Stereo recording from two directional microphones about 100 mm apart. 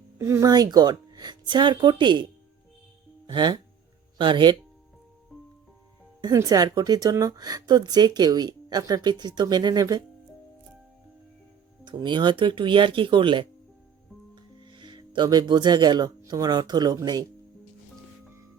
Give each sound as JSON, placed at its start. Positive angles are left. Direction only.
{"t": 0.2, "sound": "speech", "side_deg": -30}
{"t": 0.5, "sound": "speech", "side_deg": -40}
{"t": 3.2, "sound": "speech", "side_deg": -50}
{"t": 6.2, "sound": "speech", "side_deg": -40}
{"t": 11.9, "sound": "speech", "side_deg": -50}